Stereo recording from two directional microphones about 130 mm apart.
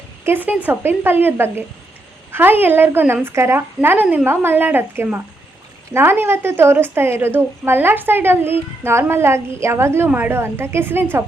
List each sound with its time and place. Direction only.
0.3 s a woman's voice: 15° right (ahead or behind)